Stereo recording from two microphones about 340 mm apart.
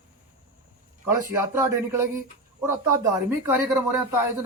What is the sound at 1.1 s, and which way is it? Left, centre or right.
Speech, centre.